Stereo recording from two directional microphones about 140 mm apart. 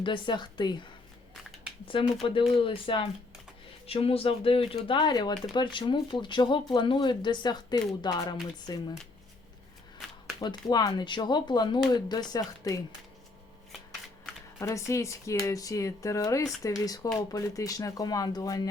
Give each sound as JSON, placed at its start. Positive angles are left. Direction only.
{"t": 0.0, "sound": "speech", "side_deg": 35}
{"t": 2.2, "sound": "speech", "side_deg": 40}
{"t": 10.4, "sound": "speech", "side_deg": 30}
{"t": 14.6, "sound": "speech", "side_deg": 20}